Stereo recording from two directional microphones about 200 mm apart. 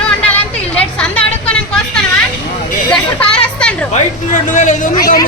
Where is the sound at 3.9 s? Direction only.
40° left (ahead or behind).